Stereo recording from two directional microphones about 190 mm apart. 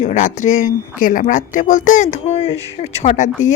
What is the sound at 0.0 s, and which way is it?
Speech, 40° left (ahead or behind).